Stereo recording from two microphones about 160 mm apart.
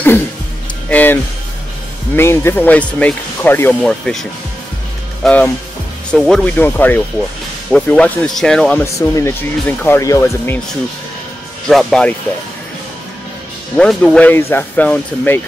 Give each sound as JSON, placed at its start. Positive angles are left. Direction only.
{"t": 0.8, "sound": "music", "side_deg": 10}
{"t": 2.1, "sound": "speech", "side_deg": 15}
{"t": 11.7, "sound": "speech", "side_deg": 5}
{"t": 13.7, "sound": "speech", "side_deg": 5}